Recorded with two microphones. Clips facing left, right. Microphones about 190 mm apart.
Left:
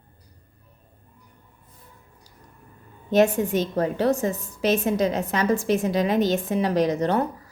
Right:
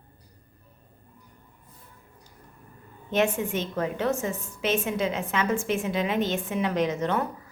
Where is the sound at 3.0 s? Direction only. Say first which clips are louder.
Left 6 dB; 40° left (ahead or behind).